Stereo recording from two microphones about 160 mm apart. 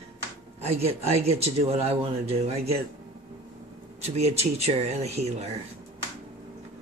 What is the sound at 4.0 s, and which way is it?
Speech, 40° right (ahead or behind).